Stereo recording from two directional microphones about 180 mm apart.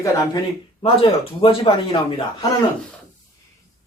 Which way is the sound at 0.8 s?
30° left (ahead or behind).